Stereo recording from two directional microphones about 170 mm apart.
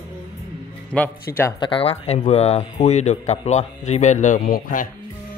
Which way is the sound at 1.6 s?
30° left (ahead or behind).